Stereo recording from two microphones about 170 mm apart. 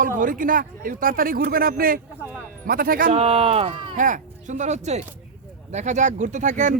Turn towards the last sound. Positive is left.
turn(degrees=-45)  # may be behind; listen again after turning